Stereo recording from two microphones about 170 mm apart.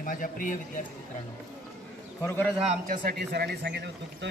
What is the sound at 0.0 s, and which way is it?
Speech, 55° left (ahead or behind).